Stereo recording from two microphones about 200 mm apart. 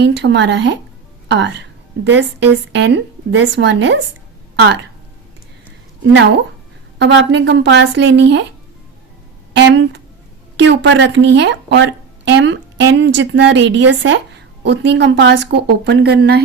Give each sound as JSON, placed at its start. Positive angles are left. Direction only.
{"t": 0.0, "sound": "speech", "side_deg": -60}
{"t": 6.1, "sound": "speech", "side_deg": -60}
{"t": 9.5, "sound": "speech", "side_deg": -60}